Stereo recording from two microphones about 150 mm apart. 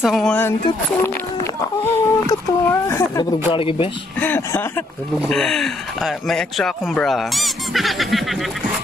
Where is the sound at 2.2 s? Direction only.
15° left (ahead or behind).